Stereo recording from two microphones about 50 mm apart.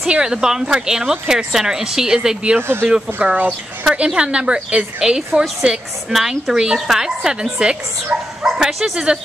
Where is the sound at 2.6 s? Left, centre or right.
Right.